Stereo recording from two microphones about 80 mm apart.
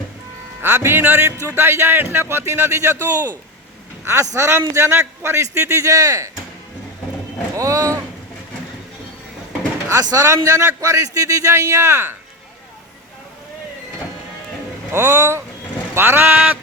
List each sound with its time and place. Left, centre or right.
0.6 s speech: right
4.0 s speech: right
7.5 s speech: right
9.9 s a man's voice: right
10.2 s a man's voice: right
14.9 s speech: right